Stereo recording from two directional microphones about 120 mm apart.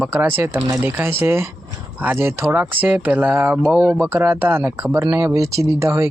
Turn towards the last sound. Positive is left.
turn(degrees=-25)  # may be behind; listen again after turning